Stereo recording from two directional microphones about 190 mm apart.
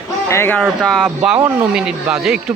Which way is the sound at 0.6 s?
5° left (ahead or behind).